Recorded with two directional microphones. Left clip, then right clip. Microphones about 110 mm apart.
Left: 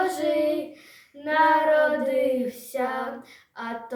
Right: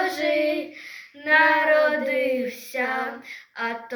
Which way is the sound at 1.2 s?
35° left (ahead or behind).